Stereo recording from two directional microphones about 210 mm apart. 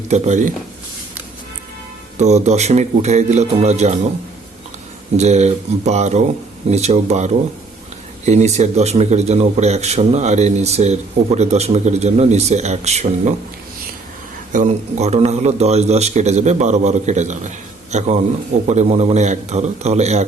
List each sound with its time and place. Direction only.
0.1 s a man's voice: 35° right (ahead or behind)
2.1 s a man's voice: 35° right (ahead or behind)
5.1 s a man's voice: 30° right (ahead or behind)
14.5 s a man's voice: 35° right (ahead or behind)